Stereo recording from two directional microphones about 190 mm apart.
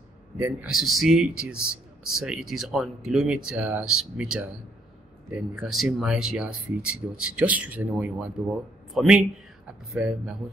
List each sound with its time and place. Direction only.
0.4 s speech: 10° right (ahead or behind)